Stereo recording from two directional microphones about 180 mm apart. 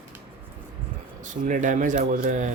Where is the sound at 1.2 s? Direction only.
45° right (ahead or behind).